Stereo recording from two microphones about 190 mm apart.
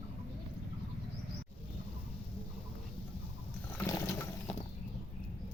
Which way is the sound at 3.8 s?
15° left (ahead or behind).